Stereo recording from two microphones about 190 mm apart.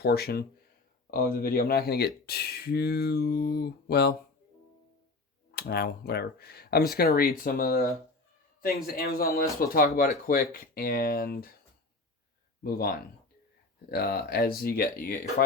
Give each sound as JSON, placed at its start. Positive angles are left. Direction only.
{"t": 0.0, "sound": "speech", "side_deg": 55}
{"t": 5.5, "sound": "speech", "side_deg": 55}
{"t": 12.6, "sound": "speech", "side_deg": 55}